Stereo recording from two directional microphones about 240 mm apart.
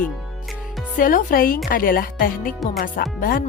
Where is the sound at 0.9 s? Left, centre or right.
Left.